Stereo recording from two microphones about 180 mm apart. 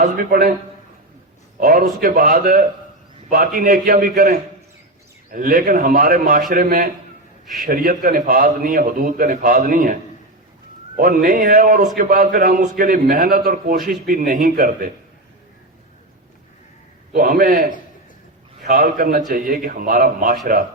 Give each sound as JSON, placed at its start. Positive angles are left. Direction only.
{"t": 0.0, "sound": "a man's voice", "side_deg": -50}
{"t": 1.5, "sound": "a man's voice", "side_deg": -50}
{"t": 17.2, "sound": "a man's voice", "side_deg": -55}